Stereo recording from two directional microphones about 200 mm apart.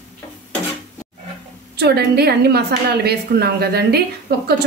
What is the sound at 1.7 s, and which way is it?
A woman's voice, 55° right (ahead or behind).